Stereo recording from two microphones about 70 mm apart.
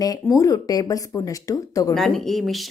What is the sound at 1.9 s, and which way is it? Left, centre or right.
Speech, centre.